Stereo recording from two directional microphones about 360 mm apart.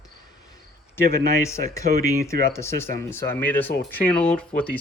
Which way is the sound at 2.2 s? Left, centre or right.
Centre.